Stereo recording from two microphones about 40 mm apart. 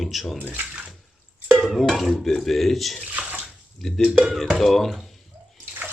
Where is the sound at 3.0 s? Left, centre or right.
Right.